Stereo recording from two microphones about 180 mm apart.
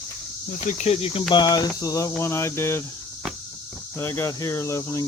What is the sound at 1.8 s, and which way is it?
Speech, 20° left (ahead or behind).